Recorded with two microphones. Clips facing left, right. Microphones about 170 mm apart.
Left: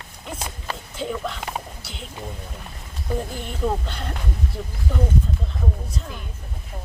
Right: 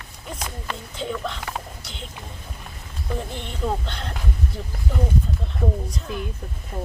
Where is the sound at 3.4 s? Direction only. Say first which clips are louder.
Left 2 dB; 5° left (ahead or behind).